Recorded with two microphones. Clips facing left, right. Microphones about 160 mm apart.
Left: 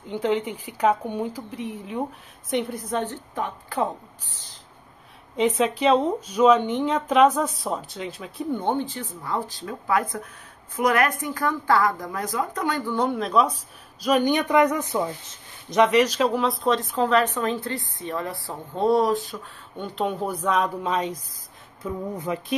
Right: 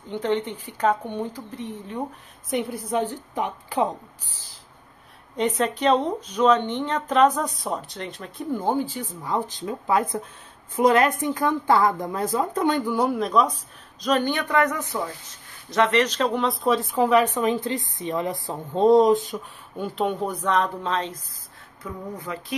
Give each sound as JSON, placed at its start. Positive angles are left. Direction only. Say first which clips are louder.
{"t": 0.1, "sound": "speech", "louder": "left 1 dB", "side_deg": 10}
{"t": 2.5, "sound": "speech", "louder": "right 1 dB", "side_deg": -5}
{"t": 5.3, "sound": "speech", "louder": "left 2 dB", "side_deg": 0}
{"t": 12.8, "sound": "speech", "louder": "right 1 dB", "side_deg": -10}
{"t": 14.0, "sound": "speech", "louder": "left 2 dB", "side_deg": 10}
{"t": 19.8, "sound": "speech", "louder": "right 1 dB", "side_deg": 0}